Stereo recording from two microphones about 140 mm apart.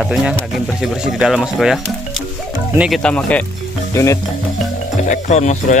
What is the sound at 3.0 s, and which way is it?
Speech, 10° left (ahead or behind).